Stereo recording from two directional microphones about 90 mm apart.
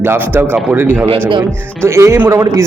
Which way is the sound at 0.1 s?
25° right (ahead or behind).